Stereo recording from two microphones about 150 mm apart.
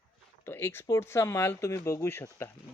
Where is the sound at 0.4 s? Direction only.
15° left (ahead or behind).